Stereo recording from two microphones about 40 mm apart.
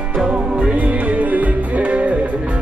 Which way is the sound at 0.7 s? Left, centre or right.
Right.